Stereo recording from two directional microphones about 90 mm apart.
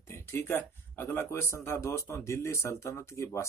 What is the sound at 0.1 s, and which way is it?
Speech, 30° left (ahead or behind).